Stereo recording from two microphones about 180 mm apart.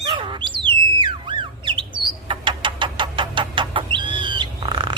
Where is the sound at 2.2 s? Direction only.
25° right (ahead or behind).